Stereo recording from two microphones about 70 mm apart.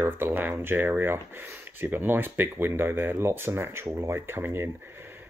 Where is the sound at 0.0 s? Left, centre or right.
Right.